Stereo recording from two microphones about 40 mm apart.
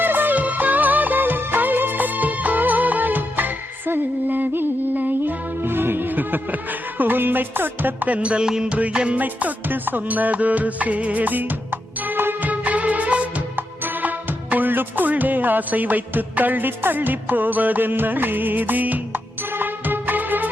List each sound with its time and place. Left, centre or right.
0.0 s music: right
5.6 s music: right
8.0 s music: right
8.4 s music: centre
9.1 s music: right
12.5 s music: right
13.6 s music: right
19.4 s music: right